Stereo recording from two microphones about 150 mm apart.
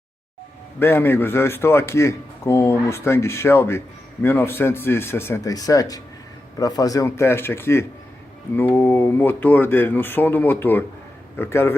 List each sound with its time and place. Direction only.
0.8 s a man's voice: 15° left (ahead or behind)